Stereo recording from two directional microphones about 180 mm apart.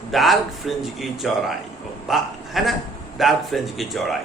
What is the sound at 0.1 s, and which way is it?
A man's voice, centre (ahead or behind).